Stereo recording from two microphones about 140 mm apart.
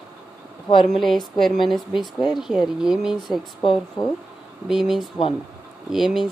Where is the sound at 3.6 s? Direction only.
35° left (ahead or behind).